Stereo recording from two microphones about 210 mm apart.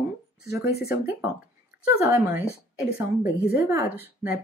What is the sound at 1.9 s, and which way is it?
Speech, 10° right (ahead or behind).